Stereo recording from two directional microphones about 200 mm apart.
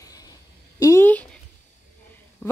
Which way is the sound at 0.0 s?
20° left (ahead or behind).